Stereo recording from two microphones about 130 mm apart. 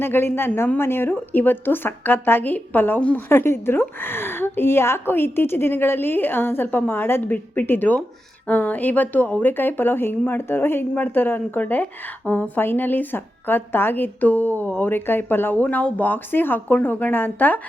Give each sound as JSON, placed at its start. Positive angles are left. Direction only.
{"t": 0.0, "sound": "speech", "side_deg": 15}